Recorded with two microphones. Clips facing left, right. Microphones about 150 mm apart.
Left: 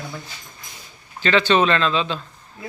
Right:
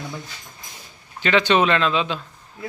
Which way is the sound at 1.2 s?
15° right (ahead or behind).